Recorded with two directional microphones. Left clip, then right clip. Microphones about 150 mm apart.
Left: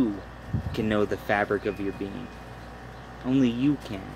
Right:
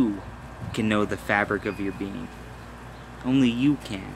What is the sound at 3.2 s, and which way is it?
Speech, 10° right (ahead or behind).